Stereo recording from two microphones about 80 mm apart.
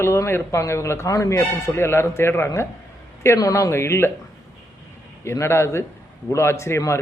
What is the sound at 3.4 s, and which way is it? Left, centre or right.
Speech, left.